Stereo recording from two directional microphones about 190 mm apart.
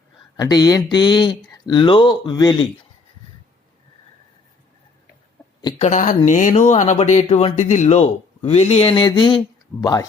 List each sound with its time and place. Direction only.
0.3 s speech: 20° left (ahead or behind)
5.8 s speech: 40° left (ahead or behind); by 10.1 s 20° left (ahead or behind)